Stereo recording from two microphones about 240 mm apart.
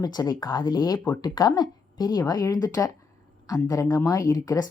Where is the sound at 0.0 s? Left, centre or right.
Centre.